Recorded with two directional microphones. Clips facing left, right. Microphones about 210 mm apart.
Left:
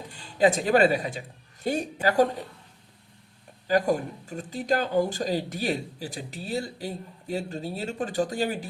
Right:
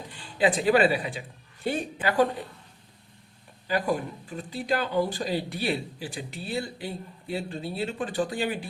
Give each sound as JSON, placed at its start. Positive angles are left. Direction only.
{"t": 0.1, "sound": "speech", "side_deg": 40}
{"t": 3.7, "sound": "speech", "side_deg": 45}